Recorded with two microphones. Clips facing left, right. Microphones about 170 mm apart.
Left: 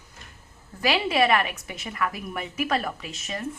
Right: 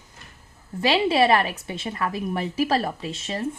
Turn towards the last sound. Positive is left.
turn(degrees=-30)  # may be behind; listen again after turning